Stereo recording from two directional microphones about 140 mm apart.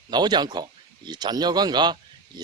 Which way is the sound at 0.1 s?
30° right (ahead or behind).